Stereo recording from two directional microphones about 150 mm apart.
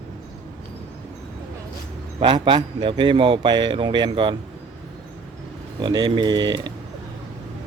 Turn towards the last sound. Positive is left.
turn(degrees=-30)  # may be behind; listen again after turning